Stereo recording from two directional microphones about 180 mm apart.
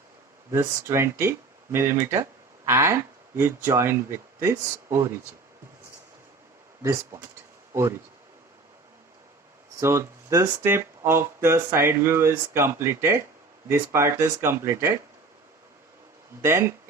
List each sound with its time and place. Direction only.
0.5 s speech: 15° right (ahead or behind)
7.1 s speech: 15° right (ahead or behind)
9.8 s speech: 15° right (ahead or behind)
16.4 s speech: 15° right (ahead or behind)